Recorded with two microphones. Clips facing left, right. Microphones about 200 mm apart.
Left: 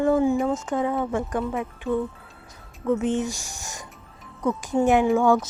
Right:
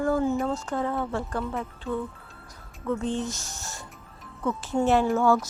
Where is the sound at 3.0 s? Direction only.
15° left (ahead or behind).